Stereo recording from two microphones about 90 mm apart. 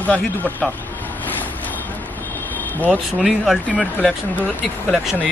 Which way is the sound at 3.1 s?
5° right (ahead or behind).